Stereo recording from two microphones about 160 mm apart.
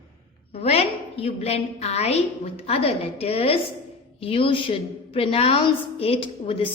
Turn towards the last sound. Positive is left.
turn(degrees=35)  # may be behind; listen again after turning